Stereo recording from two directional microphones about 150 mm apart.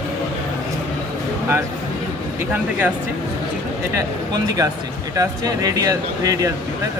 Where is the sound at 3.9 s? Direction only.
25° right (ahead or behind).